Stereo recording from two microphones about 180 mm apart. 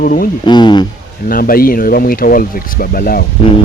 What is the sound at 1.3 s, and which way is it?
Speech, 55° left (ahead or behind).